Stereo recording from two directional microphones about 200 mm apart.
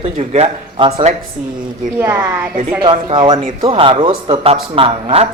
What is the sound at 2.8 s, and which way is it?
A man's voice, 25° right (ahead or behind).